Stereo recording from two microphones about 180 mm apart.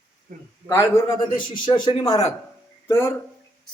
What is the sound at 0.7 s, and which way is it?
Speech, 15° left (ahead or behind).